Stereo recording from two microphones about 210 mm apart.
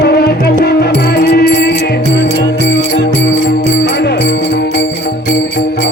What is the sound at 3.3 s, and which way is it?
Music, 45° left (ahead or behind).